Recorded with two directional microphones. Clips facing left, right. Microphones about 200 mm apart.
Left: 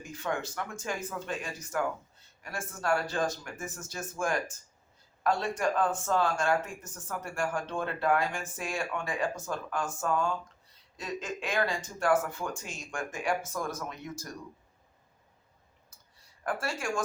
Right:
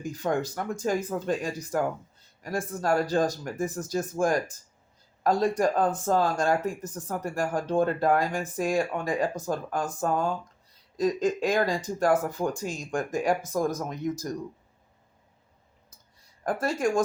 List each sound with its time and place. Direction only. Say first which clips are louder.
0.0 s speech: right 7 dB; 40° right (ahead or behind)
16.4 s speech: right 7 dB; 40° right (ahead or behind)